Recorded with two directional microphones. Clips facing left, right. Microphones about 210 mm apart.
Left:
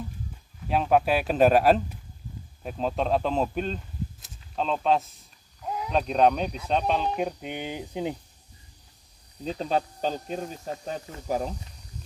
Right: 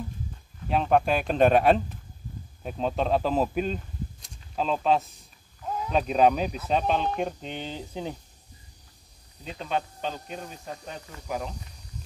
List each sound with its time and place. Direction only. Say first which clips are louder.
0.7 s speech: even; 5° left (ahead or behind)
9.4 s speech: left 4 dB; 35° left (ahead or behind)